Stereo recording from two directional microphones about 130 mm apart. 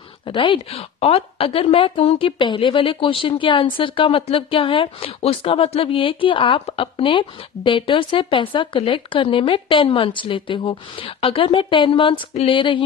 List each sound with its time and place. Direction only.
0.3 s a woman's voice: 40° left (ahead or behind)